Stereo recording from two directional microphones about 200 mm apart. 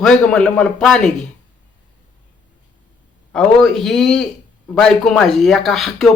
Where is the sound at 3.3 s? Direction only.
Centre (ahead or behind).